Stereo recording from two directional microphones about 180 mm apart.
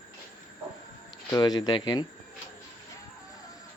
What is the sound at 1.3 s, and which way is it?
Speech, 20° left (ahead or behind).